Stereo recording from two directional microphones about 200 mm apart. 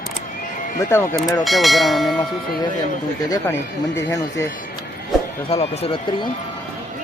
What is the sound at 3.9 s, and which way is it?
Speech, 15° left (ahead or behind).